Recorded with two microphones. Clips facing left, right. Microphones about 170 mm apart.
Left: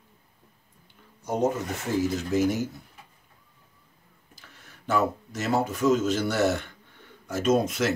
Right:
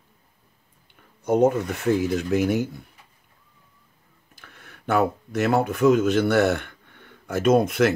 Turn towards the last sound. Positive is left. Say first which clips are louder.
# right 5 dB
turn(degrees=-60)  # may be behind; listen again after turning